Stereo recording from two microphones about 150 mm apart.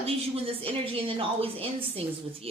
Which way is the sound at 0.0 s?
40° right (ahead or behind).